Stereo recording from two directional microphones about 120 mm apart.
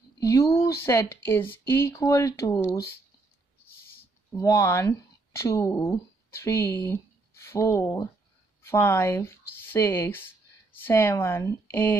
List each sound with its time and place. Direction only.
0.2 s speech: 25° left (ahead or behind)
4.4 s speech: 25° left (ahead or behind)